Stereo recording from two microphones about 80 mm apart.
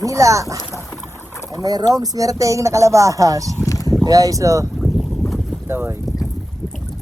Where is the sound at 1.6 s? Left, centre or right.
Right.